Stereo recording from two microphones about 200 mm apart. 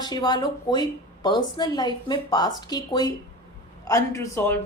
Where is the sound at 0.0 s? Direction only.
20° left (ahead or behind).